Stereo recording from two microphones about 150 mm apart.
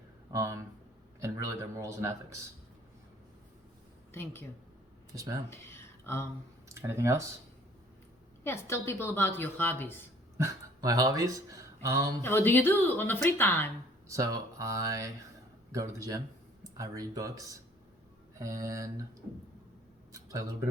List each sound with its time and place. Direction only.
0.3 s speech: 20° right (ahead or behind)
4.1 s a woman's voice: 15° left (ahead or behind)
5.5 s a sound: 15° left (ahead or behind)
6.7 s speech: 20° right (ahead or behind)
8.4 s a woman's voice: 20° left (ahead or behind)
10.3 s speech: 20° right (ahead or behind)
12.2 s a woman's voice: 15° left (ahead or behind)
14.1 s speech: 20° right (ahead or behind)
20.1 s speech: 20° right (ahead or behind)